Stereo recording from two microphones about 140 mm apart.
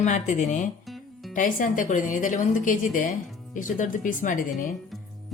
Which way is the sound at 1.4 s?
70° left (ahead or behind).